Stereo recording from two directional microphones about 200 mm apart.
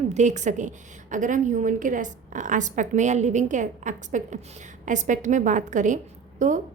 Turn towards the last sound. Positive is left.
turn(degrees=-40)  # may be behind; listen again after turning